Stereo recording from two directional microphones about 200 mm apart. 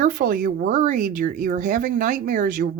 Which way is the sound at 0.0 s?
45° right (ahead or behind).